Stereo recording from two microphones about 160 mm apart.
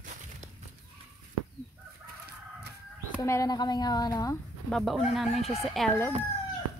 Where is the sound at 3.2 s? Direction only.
20° left (ahead or behind).